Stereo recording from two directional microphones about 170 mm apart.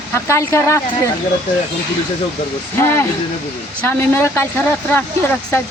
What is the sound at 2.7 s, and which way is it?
Speech, 15° left (ahead or behind).